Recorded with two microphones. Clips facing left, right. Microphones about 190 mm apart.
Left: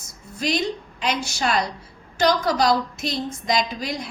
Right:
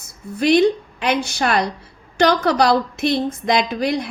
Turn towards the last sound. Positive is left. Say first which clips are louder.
# right 7 dB
turn(degrees=-60)  # may be behind; listen again after turning